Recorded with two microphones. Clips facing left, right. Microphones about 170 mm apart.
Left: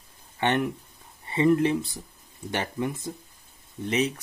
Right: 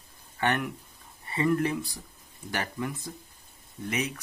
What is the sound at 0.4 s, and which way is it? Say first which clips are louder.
Speech: left 3 dB; 25° left (ahead or behind).